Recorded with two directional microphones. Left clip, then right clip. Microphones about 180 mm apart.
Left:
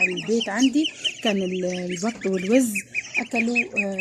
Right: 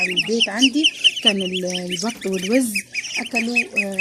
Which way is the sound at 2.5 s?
10° right (ahead or behind).